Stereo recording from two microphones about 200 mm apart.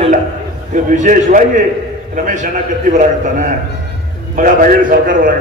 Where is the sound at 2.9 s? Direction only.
40° right (ahead or behind).